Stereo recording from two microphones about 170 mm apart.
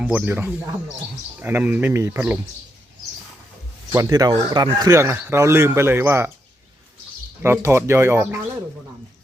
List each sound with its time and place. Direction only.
0.0 s speech: 5° right (ahead or behind)
3.9 s speech: 20° right (ahead or behind)
7.4 s speech: 15° right (ahead or behind)